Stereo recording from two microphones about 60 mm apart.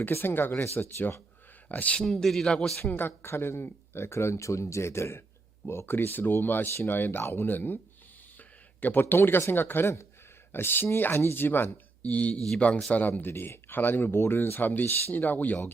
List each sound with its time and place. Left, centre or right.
0.0 s speech: left
2.0 s speech: centre
2.9 s speech: left
7.4 s speech: left
8.4 s a sound: left
9.5 s speech: left
9.8 s speech: left
10.5 s speech: left
12.0 s speech: left
13.3 s speech: left
14.7 s speech: left